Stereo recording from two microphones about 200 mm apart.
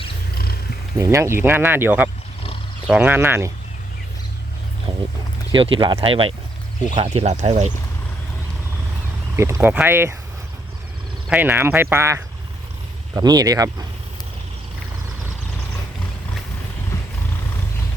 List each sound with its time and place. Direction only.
0.9 s speech: 15° right (ahead or behind)
4.9 s a sound: 25° right (ahead or behind)
5.5 s speech: 25° right (ahead or behind)
9.3 s speech: 15° right (ahead or behind)
11.3 s speech: 10° right (ahead or behind)